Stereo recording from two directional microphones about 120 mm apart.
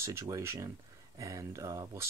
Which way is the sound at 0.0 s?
25° right (ahead or behind).